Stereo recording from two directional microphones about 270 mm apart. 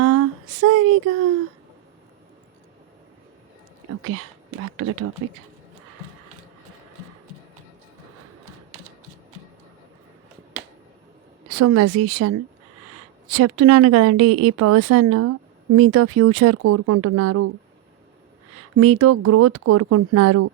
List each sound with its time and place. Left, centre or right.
0.0 s a sound: right
4.0 s a woman's voice: right
11.4 s a woman's voice: right
18.5 s a woman's voice: right